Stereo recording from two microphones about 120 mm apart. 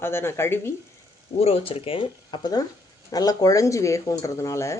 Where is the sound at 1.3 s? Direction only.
55° left (ahead or behind); by 4.7 s 25° left (ahead or behind).